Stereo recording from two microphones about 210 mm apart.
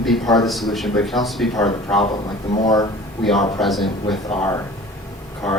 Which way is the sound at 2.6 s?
20° left (ahead or behind).